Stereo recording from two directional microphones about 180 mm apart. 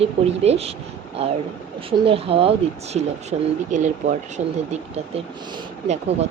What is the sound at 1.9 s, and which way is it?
Speech, 30° right (ahead or behind).